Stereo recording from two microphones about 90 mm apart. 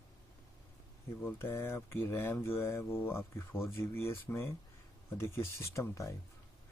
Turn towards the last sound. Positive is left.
turn(degrees=35)  # may be behind; listen again after turning